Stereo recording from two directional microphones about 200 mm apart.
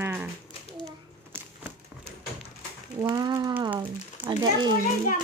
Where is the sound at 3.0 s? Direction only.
20° right (ahead or behind).